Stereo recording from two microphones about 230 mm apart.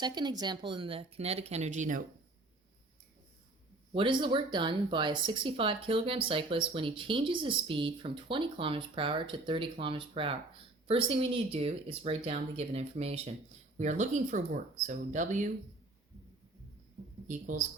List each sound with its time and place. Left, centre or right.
0.0 s speech: centre
3.9 s speech: right
17.2 s speech: right